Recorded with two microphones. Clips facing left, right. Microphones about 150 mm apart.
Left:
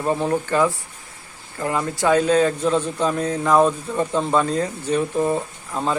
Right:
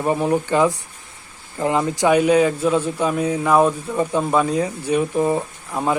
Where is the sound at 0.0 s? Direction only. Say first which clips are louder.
Right 2 dB; 15° right (ahead or behind).